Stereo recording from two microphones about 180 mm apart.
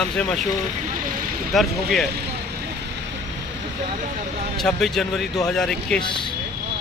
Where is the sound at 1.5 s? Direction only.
Centre (ahead or behind).